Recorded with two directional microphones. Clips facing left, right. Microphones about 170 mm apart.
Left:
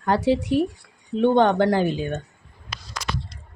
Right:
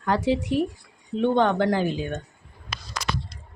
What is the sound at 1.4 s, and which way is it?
Speech, 35° left (ahead or behind).